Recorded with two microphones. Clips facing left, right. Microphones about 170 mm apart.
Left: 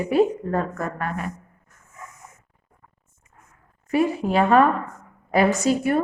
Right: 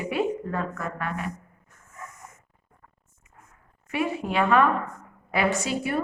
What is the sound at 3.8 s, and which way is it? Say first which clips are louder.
A woman's voice: left 6 dB; 40° left (ahead or behind).